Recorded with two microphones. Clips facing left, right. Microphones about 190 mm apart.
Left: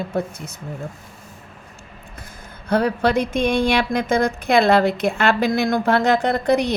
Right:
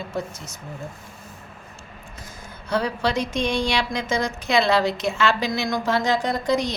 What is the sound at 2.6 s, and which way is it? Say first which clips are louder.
Speech: left 5 dB; 55° left (ahead or behind).